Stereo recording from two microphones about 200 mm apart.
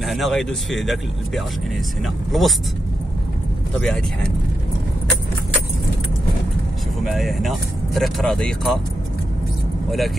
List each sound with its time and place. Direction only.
0.0 s speech: centre (ahead or behind)
3.8 s speech: 5° left (ahead or behind)
7.0 s speech: centre (ahead or behind)
9.8 s speech: centre (ahead or behind)